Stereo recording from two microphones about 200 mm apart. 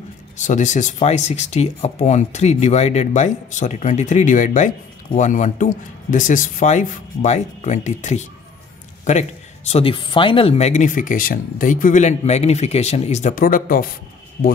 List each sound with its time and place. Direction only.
0.4 s speech: 40° left (ahead or behind)
9.7 s speech: 30° left (ahead or behind); by 13.8 s 45° left (ahead or behind)